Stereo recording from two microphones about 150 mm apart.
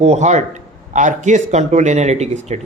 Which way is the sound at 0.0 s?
50° right (ahead or behind).